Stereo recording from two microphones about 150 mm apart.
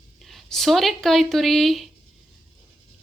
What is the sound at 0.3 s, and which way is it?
A woman's voice, centre (ahead or behind).